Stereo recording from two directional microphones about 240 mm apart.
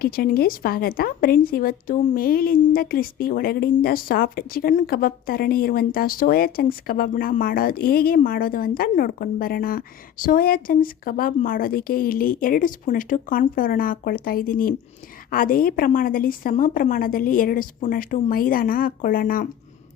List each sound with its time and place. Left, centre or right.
0.0 s speech: left